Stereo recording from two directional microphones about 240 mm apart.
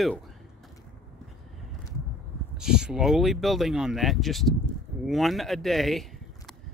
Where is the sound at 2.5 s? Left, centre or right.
Centre.